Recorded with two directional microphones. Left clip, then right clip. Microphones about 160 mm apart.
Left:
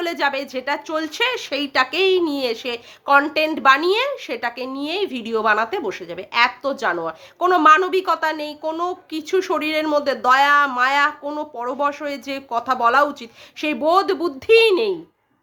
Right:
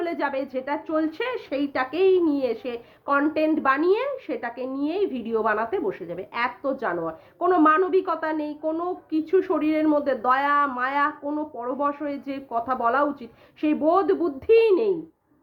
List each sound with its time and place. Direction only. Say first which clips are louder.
0.0 s speech: left 5 dB; 20° left (ahead or behind)